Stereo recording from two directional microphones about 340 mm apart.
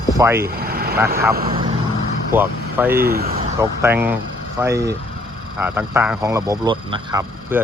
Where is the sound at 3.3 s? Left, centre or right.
Centre.